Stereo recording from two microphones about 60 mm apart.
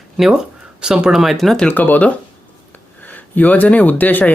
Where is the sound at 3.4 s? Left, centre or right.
Left.